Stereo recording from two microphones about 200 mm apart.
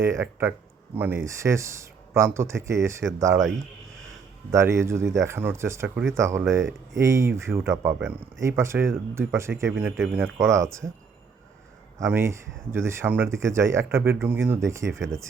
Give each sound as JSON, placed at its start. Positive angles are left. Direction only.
{"t": 0.0, "sound": "speech", "side_deg": -15}
{"t": 4.5, "sound": "speech", "side_deg": -15}
{"t": 12.0, "sound": "speech", "side_deg": -10}
{"t": 14.8, "sound": "speech", "side_deg": -70}